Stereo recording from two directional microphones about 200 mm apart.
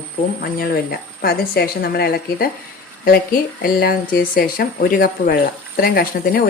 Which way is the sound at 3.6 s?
45° left (ahead or behind).